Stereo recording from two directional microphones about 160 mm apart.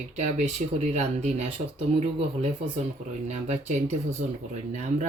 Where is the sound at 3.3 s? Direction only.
45° right (ahead or behind).